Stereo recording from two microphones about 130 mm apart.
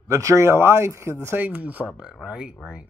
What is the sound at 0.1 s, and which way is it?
Speech, 20° right (ahead or behind).